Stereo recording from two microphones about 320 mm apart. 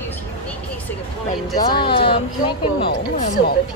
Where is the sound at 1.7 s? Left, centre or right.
Centre.